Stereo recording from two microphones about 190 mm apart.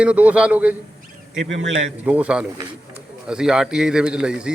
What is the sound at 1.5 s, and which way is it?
Speech, 80° right.